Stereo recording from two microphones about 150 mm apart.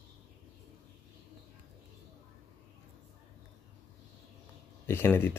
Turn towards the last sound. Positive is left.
turn(degrees=15)  # may be behind; listen again after turning